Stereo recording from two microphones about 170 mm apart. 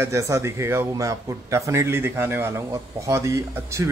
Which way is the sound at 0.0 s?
15° right (ahead or behind).